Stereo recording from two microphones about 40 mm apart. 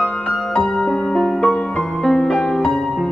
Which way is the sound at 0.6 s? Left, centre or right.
Centre.